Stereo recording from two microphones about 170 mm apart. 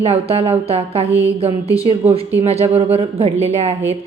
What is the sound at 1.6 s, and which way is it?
Speech, 20° left (ahead or behind).